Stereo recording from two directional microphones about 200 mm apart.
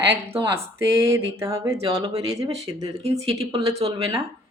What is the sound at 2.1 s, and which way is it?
Speech, 30° right (ahead or behind).